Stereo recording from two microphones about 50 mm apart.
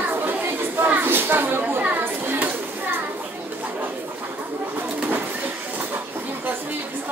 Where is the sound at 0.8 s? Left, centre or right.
Right.